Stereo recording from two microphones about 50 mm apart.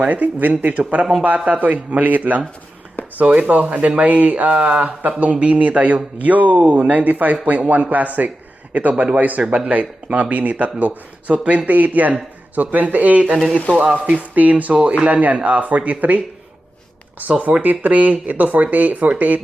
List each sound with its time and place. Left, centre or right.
0.0 s speech: right